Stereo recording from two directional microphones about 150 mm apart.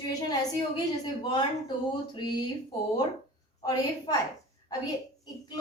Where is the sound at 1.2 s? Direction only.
30° left (ahead or behind).